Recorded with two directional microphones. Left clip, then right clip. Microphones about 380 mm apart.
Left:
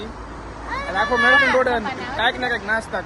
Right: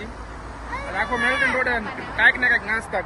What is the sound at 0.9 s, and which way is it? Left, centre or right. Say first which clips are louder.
Speech: left 5 dB; centre.